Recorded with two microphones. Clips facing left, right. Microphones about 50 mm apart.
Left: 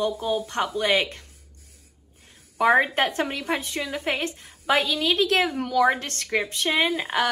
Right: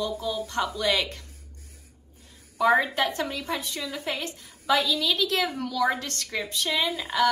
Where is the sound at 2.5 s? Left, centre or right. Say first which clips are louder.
Left 2 dB; left.